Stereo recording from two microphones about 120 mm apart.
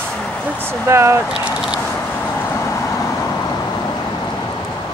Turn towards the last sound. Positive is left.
turn(degrees=25)  # may be behind; listen again after turning